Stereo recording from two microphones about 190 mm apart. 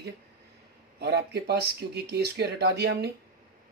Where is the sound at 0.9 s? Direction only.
60° right (ahead or behind).